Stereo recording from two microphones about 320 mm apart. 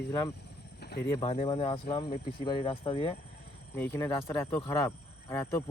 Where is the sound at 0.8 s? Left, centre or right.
Left.